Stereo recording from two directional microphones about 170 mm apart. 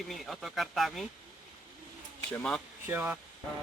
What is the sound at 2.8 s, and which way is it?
Speech, 10° right (ahead or behind).